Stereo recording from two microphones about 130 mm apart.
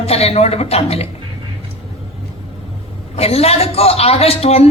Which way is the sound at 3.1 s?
50° left (ahead or behind).